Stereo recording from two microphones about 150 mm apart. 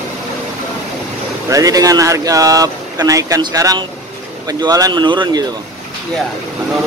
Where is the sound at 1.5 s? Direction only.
25° right (ahead or behind).